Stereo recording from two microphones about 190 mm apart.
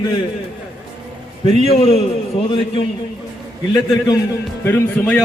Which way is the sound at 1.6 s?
30° left (ahead or behind).